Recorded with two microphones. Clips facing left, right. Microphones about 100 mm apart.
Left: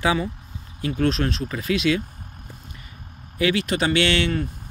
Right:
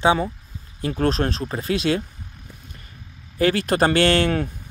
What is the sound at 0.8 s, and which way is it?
Speech, 35° right (ahead or behind).